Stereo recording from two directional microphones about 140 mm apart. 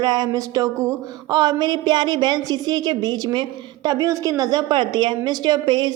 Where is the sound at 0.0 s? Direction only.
30° right (ahead or behind).